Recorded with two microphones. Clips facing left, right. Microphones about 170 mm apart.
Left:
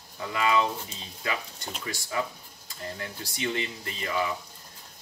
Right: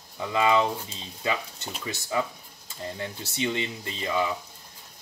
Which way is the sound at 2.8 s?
25° right (ahead or behind).